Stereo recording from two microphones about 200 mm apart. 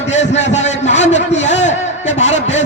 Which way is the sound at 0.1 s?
35° left (ahead or behind).